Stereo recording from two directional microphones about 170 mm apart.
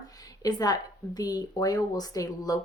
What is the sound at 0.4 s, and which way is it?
Speech, 20° left (ahead or behind).